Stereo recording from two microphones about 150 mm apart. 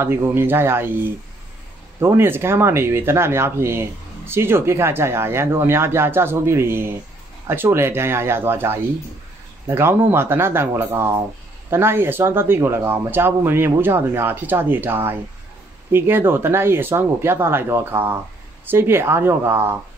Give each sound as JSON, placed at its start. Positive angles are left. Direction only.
{"t": 0.0, "sound": "speech", "side_deg": -15}